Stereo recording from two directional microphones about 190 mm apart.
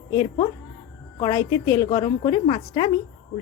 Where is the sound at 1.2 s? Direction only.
20° left (ahead or behind).